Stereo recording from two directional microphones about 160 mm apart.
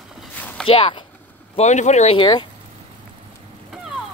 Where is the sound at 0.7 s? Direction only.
35° left (ahead or behind).